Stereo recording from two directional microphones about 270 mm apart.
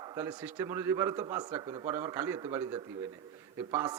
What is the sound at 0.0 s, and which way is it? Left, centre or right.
A man's voice, centre.